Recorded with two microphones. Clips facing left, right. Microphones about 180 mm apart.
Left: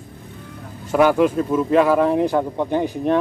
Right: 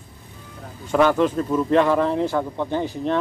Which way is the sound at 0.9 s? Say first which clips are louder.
Left 2 dB; 10° left (ahead or behind).